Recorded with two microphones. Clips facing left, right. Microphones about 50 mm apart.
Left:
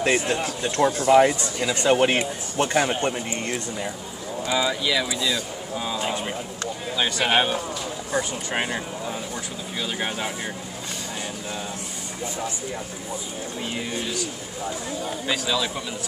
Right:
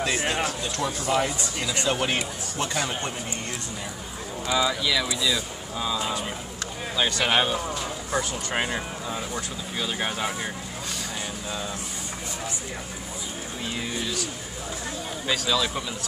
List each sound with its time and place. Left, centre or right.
0.2 s speech: right
0.6 s speech: left
4.5 s speech: centre
7.0 s speech: centre
9.9 s speech: centre
15.2 s speech: centre